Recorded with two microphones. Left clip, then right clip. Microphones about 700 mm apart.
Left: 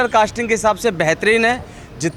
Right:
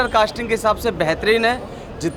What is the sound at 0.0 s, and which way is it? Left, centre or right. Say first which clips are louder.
Speech: left 2 dB; left.